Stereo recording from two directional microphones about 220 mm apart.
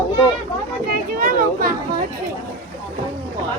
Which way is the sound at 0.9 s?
40° right (ahead or behind).